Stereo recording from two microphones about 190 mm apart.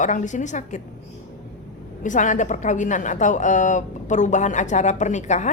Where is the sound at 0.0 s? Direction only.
40° left (ahead or behind).